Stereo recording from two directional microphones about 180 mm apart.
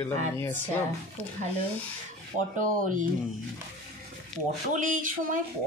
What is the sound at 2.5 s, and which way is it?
Speech, 45° right (ahead or behind).